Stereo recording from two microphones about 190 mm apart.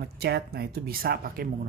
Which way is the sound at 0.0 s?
55° right (ahead or behind).